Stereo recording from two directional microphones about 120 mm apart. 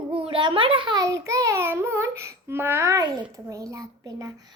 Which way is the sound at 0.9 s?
25° right (ahead or behind).